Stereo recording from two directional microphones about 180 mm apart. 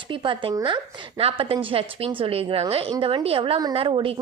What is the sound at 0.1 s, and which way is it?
A woman's voice, 30° right (ahead or behind).